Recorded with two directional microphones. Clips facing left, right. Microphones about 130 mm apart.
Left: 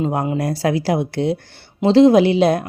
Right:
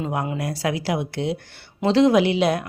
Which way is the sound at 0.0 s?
35° left (ahead or behind).